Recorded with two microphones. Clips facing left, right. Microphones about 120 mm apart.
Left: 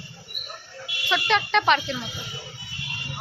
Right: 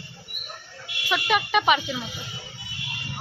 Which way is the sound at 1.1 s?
10° right (ahead or behind).